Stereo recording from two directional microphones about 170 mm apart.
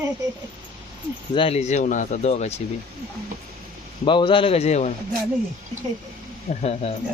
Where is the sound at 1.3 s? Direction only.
35° left (ahead or behind).